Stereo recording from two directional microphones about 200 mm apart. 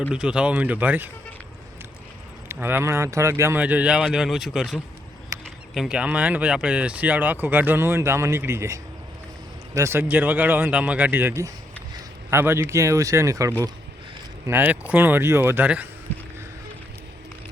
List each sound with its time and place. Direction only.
0.1 s speech: 5° right (ahead or behind)
2.5 s speech: 10° right (ahead or behind)
5.3 s a sound: 15° right (ahead or behind)
5.7 s speech: 5° right (ahead or behind)
11.9 s a sound: 10° right (ahead or behind)
12.7 s speech: 15° right (ahead or behind)